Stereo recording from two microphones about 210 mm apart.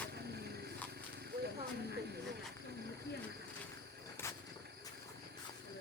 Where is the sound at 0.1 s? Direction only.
50° right (ahead or behind).